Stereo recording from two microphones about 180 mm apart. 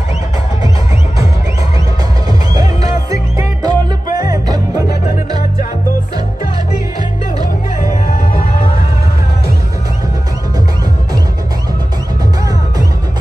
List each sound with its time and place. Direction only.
2.5 s music: 20° right (ahead or behind)